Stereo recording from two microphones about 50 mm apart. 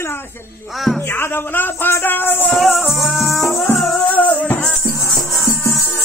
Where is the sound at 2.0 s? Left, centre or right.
Left.